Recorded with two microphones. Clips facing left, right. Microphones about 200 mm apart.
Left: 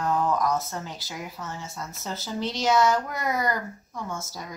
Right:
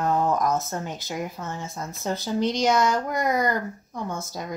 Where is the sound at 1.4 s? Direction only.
50° right (ahead or behind).